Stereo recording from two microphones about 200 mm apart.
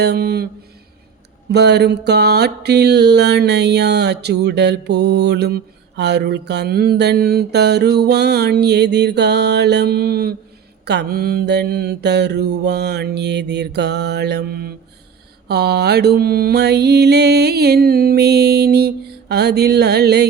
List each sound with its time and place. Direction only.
0.0 s mantra: 55° right (ahead or behind)
1.5 s mantra: 55° right (ahead or behind)